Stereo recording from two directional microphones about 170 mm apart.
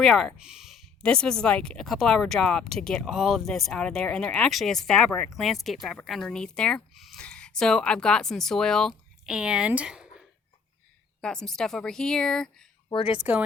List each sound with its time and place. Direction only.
0.0 s speech: 5° left (ahead or behind)
12.9 s speech: 30° left (ahead or behind)
13.1 s speech: 10° right (ahead or behind)